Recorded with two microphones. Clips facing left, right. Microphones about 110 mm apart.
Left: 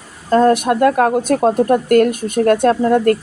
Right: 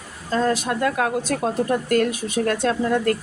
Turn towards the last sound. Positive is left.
turn(degrees=50)  # may be behind; listen again after turning